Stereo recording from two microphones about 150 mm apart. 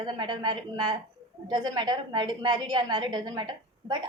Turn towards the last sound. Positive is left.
turn(degrees=-30)  # may be behind; listen again after turning